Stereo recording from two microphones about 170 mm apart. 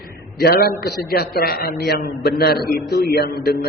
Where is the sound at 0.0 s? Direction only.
65° left (ahead or behind).